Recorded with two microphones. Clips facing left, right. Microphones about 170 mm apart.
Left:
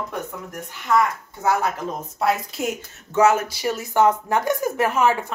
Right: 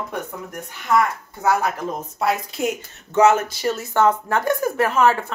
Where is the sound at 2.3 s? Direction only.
5° left (ahead or behind).